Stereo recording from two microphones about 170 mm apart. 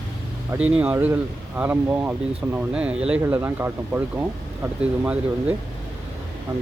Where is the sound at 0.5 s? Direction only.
10° right (ahead or behind).